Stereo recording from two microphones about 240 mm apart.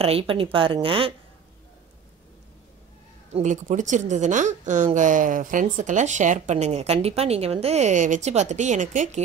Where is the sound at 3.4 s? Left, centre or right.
Right.